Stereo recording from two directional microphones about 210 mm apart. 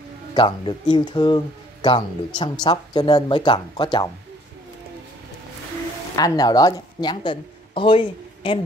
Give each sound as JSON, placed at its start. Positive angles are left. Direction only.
{"t": 0.3, "sound": "speech", "side_deg": 25}
{"t": 6.1, "sound": "speech", "side_deg": 20}